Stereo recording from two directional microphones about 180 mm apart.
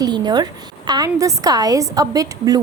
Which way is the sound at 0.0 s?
25° right (ahead or behind).